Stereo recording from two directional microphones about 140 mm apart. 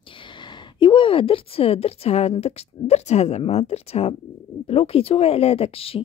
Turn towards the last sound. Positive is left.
turn(degrees=40)  # may be behind; listen again after turning